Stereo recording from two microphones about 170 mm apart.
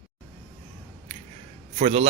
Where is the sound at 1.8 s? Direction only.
35° right (ahead or behind).